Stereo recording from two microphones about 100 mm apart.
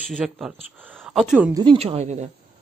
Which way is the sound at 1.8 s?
90° right.